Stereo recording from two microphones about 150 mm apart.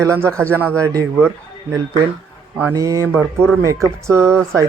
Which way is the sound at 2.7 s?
25° right (ahead or behind).